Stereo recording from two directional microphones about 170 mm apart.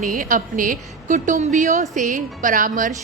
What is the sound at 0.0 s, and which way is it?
A woman's voice, 50° right (ahead or behind).